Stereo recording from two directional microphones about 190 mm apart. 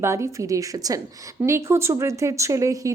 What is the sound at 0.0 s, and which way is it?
A woman's voice, 15° right (ahead or behind).